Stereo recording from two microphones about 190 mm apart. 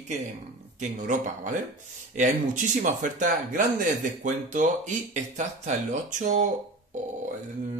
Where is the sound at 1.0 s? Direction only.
40° right (ahead or behind).